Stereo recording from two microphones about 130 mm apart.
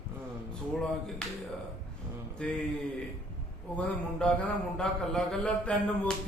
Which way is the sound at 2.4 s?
10° left (ahead or behind).